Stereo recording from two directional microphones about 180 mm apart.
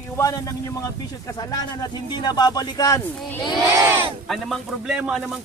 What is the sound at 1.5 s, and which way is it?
Speech, 20° left (ahead or behind).